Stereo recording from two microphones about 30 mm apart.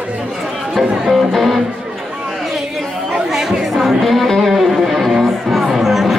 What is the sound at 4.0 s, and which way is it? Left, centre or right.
Music, centre.